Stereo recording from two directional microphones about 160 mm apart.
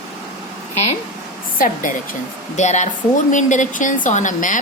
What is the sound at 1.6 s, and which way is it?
A woman's voice, 55° left (ahead or behind).